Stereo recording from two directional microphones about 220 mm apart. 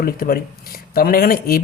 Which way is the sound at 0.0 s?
40° left (ahead or behind).